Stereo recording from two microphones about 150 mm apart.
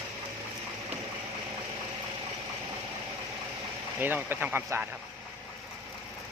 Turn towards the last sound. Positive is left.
turn(degrees=-10)  # may be behind; listen again after turning